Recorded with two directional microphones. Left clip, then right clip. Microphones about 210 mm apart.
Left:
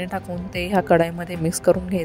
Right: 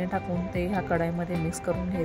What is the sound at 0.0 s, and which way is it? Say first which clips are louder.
Speech: left 2 dB; 40° left (ahead or behind).